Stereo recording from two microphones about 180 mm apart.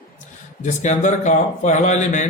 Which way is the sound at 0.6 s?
40° left (ahead or behind).